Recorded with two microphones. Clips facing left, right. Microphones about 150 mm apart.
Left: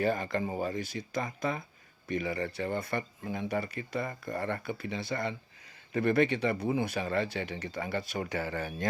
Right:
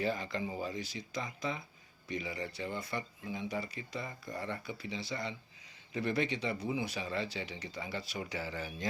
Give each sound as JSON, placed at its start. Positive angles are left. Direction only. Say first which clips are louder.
{"t": 0.0, "sound": "speech", "louder": "left 5 dB", "side_deg": 55}